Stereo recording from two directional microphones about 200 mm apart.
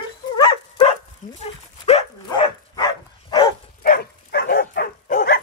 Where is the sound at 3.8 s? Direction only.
50° left (ahead or behind).